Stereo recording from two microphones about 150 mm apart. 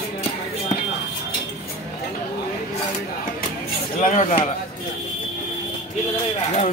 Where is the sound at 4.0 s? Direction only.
55° left (ahead or behind).